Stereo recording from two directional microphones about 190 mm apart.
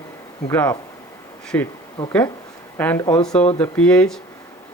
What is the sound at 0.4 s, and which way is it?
Speech, 15° left (ahead or behind).